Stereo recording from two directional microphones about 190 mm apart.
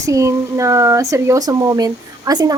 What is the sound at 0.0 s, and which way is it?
Speech, 15° right (ahead or behind).